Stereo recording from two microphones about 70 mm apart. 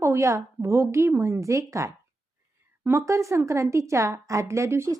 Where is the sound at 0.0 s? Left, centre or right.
Right.